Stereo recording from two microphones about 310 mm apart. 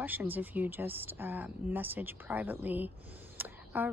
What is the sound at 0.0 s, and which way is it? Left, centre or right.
Speech, centre.